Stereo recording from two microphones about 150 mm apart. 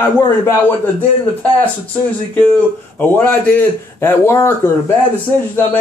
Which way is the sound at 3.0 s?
10° left (ahead or behind).